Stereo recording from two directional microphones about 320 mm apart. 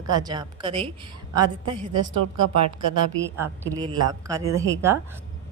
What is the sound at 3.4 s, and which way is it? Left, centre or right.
A woman's voice, centre.